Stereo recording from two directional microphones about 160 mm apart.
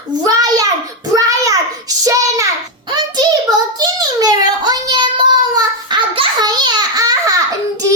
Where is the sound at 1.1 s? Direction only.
20° right (ahead or behind).